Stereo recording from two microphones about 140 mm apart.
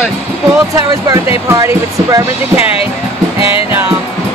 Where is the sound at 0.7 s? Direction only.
25° right (ahead or behind).